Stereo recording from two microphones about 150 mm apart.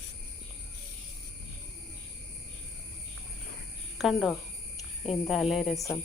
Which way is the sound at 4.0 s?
5° right (ahead or behind).